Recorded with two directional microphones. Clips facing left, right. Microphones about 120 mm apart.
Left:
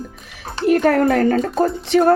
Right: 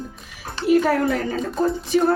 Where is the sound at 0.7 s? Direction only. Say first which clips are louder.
Left 3 dB; 60° left (ahead or behind).